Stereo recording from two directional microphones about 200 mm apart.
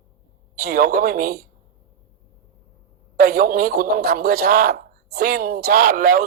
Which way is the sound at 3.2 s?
50° right (ahead or behind).